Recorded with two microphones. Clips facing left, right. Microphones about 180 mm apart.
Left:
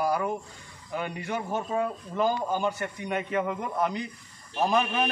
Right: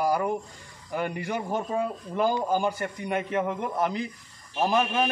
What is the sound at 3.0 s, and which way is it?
Speech, centre (ahead or behind).